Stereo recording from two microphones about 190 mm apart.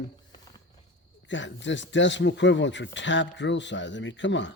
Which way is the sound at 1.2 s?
75° left (ahead or behind).